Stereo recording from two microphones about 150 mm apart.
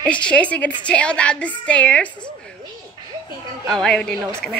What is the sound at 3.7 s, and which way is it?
Speech, 5° left (ahead or behind).